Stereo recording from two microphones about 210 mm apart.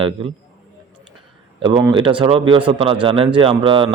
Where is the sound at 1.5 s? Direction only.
25° right (ahead or behind).